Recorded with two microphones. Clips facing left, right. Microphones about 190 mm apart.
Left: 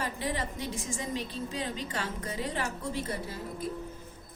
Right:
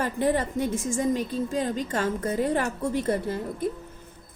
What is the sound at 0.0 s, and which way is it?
A woman's voice, 50° right (ahead or behind).